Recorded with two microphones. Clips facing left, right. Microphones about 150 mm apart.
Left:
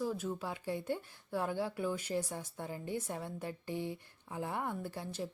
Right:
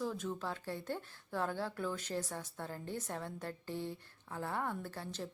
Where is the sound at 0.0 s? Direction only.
10° left (ahead or behind).